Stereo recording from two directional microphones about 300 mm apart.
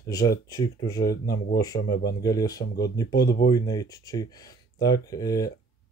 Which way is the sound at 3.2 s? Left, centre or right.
Left.